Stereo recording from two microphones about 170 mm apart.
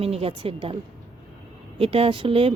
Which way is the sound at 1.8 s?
35° right (ahead or behind).